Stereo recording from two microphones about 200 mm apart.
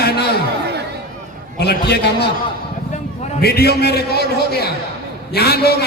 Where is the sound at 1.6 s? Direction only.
55° left (ahead or behind).